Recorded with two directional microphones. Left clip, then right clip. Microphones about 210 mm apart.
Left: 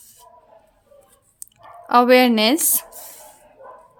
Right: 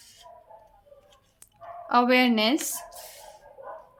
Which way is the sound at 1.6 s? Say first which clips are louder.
Left 7 dB; 30° left (ahead or behind).